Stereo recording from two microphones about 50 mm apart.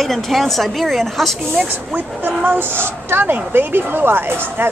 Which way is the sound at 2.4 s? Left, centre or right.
Right.